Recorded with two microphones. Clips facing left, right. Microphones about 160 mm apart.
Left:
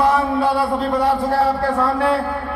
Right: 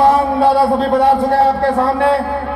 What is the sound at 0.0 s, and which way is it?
A man's voice, 25° right (ahead or behind).